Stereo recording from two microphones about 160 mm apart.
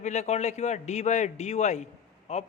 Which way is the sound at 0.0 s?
45° left (ahead or behind).